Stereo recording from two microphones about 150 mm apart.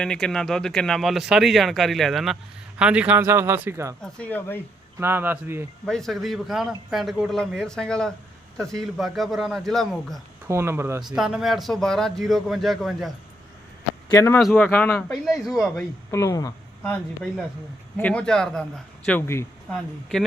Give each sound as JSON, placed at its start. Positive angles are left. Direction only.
{"t": 0.0, "sound": "speech", "side_deg": 5}
{"t": 4.0, "sound": "speech", "side_deg": 10}
{"t": 4.9, "sound": "speech", "side_deg": -15}
{"t": 5.8, "sound": "speech", "side_deg": 5}
{"t": 10.4, "sound": "speech", "side_deg": -15}
{"t": 11.1, "sound": "speech", "side_deg": -5}
{"t": 14.1, "sound": "speech", "side_deg": 20}
{"t": 15.3, "sound": "speech", "side_deg": 0}
{"t": 16.1, "sound": "speech", "side_deg": 20}
{"t": 17.9, "sound": "speech", "side_deg": 10}
{"t": 19.0, "sound": "speech", "side_deg": 15}